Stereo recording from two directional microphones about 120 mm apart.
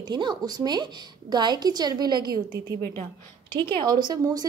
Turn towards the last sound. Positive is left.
turn(degrees=-35)  # may be behind; listen again after turning